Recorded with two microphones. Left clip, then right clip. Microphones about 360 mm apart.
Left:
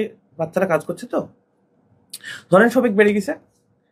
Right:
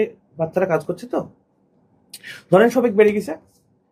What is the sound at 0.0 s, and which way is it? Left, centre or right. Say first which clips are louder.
Speech: right 3 dB; centre.